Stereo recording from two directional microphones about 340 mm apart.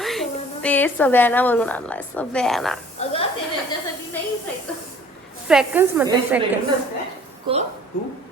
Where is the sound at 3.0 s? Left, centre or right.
Centre.